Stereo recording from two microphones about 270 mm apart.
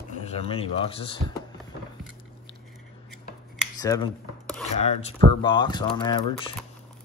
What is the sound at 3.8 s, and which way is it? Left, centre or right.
Speech, centre.